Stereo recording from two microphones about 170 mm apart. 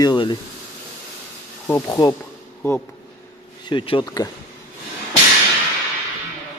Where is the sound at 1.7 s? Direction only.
20° left (ahead or behind).